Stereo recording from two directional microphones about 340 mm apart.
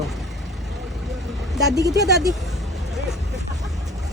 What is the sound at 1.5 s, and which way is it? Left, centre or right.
Speech, centre.